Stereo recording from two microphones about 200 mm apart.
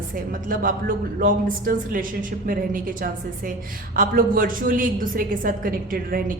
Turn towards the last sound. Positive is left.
turn(degrees=-45)  # may be behind; listen again after turning